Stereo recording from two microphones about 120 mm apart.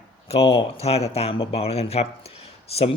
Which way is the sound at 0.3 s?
50° left (ahead or behind).